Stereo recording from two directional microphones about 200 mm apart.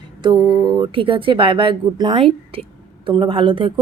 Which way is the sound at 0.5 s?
20° right (ahead or behind).